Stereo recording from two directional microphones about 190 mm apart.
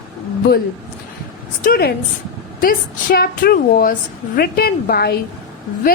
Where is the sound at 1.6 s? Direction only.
50° left (ahead or behind).